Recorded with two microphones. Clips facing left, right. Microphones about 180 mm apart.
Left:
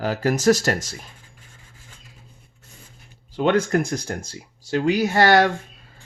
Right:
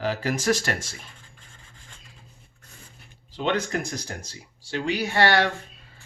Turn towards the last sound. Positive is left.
turn(degrees=45)  # may be behind; listen again after turning